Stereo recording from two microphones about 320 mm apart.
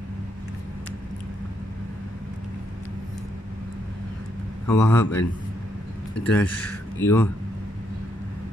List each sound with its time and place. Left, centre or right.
4.6 s a man's voice: centre
6.2 s a man's voice: centre